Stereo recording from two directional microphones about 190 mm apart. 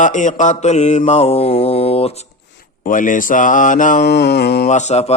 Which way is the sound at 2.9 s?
45° left (ahead or behind).